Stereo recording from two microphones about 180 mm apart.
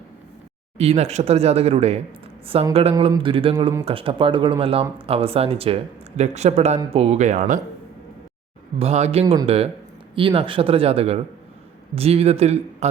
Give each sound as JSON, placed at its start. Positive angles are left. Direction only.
{"t": 0.8, "sound": "speech", "side_deg": -35}
{"t": 2.9, "sound": "a sound", "side_deg": -25}
{"t": 3.8, "sound": "speech", "side_deg": -30}
{"t": 8.8, "sound": "speech", "side_deg": -35}
{"t": 9.2, "sound": "a sound", "side_deg": -20}
{"t": 10.2, "sound": "speech", "side_deg": -30}